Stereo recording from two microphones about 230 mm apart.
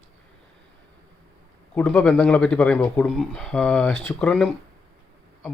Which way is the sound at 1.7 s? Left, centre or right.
Centre.